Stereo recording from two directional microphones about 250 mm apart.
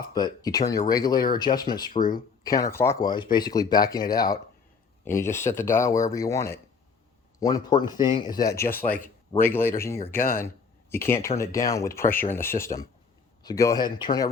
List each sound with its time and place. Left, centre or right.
0.1 s speech: centre